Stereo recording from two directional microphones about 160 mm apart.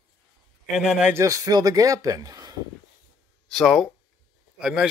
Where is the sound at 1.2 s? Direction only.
20° right (ahead or behind).